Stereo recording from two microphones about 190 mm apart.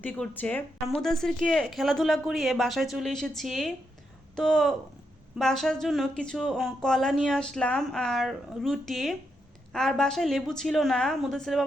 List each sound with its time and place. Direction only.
0.0 s speech: 5° left (ahead or behind)